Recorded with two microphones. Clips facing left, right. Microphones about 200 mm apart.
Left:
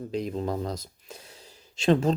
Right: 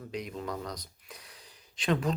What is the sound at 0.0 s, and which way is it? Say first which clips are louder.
Speech: left 7 dB; 30° left (ahead or behind).